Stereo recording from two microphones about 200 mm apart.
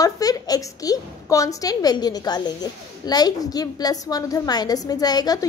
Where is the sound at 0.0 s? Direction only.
20° left (ahead or behind).